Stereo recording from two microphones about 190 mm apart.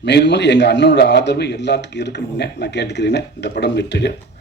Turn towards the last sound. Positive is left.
turn(degrees=65)  # may be behind; listen again after turning